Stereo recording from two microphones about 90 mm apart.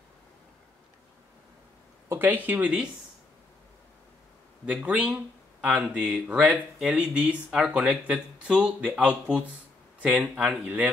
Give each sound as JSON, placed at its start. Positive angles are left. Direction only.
{"t": 2.0, "sound": "speech", "side_deg": -20}
{"t": 4.6, "sound": "speech", "side_deg": -15}